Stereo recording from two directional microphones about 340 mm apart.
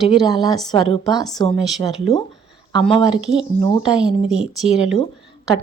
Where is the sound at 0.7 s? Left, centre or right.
Centre.